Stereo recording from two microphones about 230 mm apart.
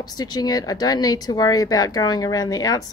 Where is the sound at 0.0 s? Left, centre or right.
Centre.